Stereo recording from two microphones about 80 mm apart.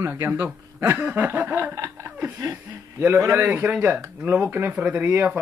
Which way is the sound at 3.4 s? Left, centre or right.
Right.